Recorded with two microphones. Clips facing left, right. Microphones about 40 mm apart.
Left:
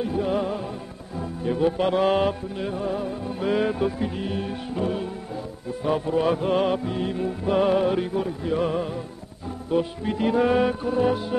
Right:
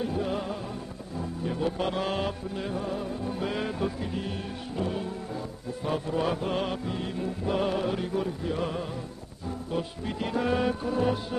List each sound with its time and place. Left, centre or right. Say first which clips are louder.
0.0 s music: left 5 dB; centre
2.5 s music: left 4 dB; centre